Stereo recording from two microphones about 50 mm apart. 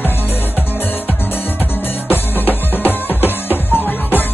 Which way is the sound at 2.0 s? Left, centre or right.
Left.